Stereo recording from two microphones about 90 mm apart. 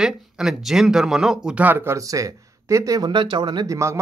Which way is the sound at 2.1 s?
35° right (ahead or behind).